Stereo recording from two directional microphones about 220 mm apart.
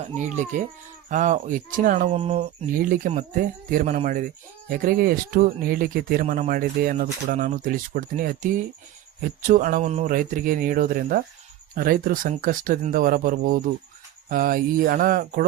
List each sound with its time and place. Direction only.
0.2 s speech: 35° right (ahead or behind)